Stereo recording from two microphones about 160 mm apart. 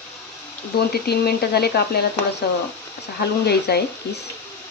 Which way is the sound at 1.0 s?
85° left.